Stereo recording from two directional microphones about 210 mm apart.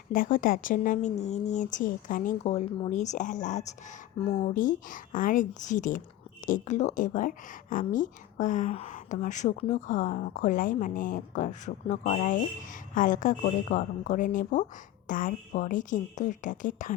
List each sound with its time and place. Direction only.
0.1 s speech: 40° left (ahead or behind); by 4.5 s 25° left (ahead or behind)
4.5 s speech: 40° left (ahead or behind)